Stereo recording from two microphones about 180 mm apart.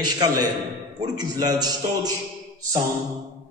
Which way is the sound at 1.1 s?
20° right (ahead or behind).